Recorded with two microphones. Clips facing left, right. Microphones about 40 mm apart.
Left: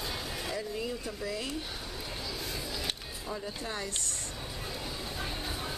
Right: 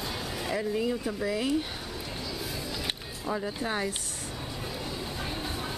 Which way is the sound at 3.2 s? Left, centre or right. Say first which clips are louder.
Right 7 dB; right.